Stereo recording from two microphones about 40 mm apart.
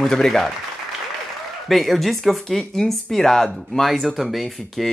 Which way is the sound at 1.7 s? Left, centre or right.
Centre.